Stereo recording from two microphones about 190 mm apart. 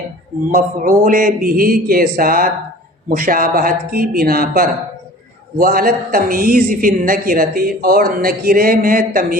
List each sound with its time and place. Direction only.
0.5 s a man's voice: 45° right (ahead or behind)